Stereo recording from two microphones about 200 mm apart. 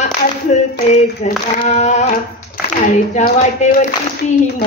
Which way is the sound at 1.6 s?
35° left (ahead or behind).